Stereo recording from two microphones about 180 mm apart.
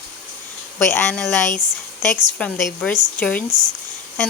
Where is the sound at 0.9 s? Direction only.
15° left (ahead or behind).